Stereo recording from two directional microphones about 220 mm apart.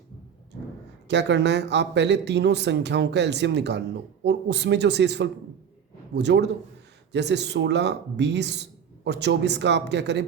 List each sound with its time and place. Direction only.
1.0 s speech: 50° right (ahead or behind)